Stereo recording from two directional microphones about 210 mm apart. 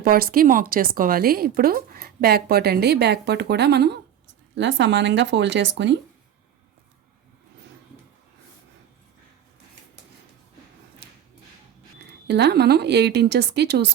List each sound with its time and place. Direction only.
0.0 s speech: 45° right (ahead or behind)
12.3 s speech: 50° right (ahead or behind)